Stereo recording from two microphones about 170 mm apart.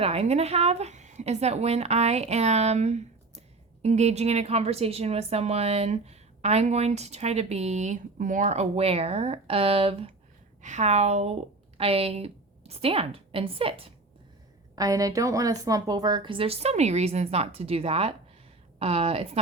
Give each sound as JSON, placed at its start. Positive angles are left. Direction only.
{"t": 0.0, "sound": "a woman's voice", "side_deg": -35}
{"t": 14.8, "sound": "a woman's voice", "side_deg": -20}